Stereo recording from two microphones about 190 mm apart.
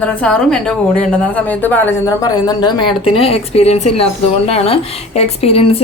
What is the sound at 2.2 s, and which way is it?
Speech, 20° left (ahead or behind).